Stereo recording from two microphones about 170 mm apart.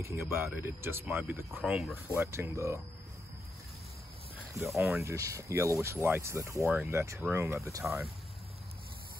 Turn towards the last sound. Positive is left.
turn(degrees=-15)  # may be behind; listen again after turning